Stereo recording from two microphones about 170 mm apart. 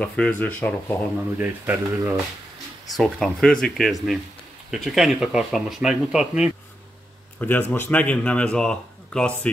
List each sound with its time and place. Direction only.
0.0 s speech: 5° left (ahead or behind)
1.4 s speech: 10° right (ahead or behind)
3.0 s speech: 5° left (ahead or behind)
7.3 s speech: 10° left (ahead or behind)